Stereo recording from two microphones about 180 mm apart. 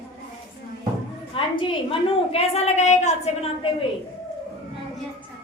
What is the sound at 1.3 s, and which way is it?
A woman's voice, 30° left (ahead or behind).